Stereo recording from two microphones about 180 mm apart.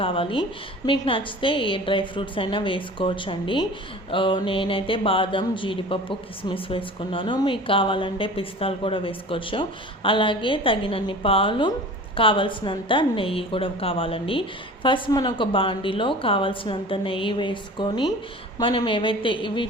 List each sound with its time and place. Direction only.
0.0 s speech: 30° left (ahead or behind)